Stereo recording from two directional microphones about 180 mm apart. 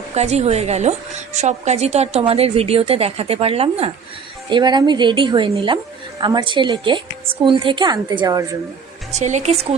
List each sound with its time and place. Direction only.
0.1 s a woman's voice: 35° right (ahead or behind); by 8.4 s 20° right (ahead or behind)
9.1 s a woman's voice: 40° right (ahead or behind)